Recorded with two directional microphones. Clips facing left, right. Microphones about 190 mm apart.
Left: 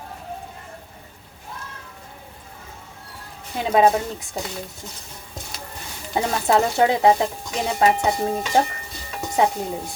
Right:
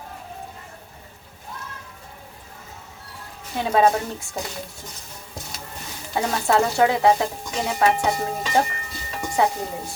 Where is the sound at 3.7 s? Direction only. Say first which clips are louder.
Left 2 dB; 20° left (ahead or behind).